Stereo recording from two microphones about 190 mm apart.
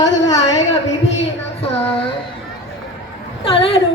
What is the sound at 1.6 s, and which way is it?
Speech, 30° left (ahead or behind).